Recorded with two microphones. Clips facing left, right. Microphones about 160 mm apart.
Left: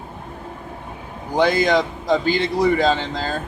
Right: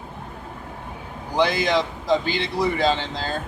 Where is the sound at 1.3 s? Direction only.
45° left (ahead or behind).